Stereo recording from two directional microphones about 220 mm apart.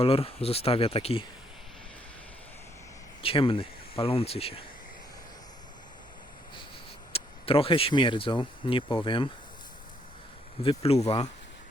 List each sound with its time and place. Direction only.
0.0 s speech: 25° left (ahead or behind)
3.2 s speech: 25° left (ahead or behind)
7.1 s speech: 25° left (ahead or behind)
10.6 s speech: 25° left (ahead or behind)